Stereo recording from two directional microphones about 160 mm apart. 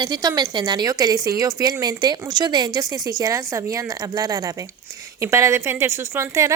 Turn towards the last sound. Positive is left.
turn(degrees=-20)  # may be behind; listen again after turning